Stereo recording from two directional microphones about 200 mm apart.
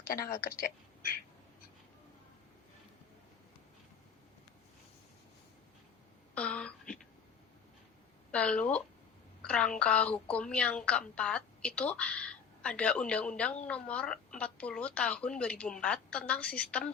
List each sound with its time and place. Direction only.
0.0 s a woman's voice: 45° left (ahead or behind)
6.3 s a sound: 5° left (ahead or behind)
8.3 s a woman's voice: 5° left (ahead or behind)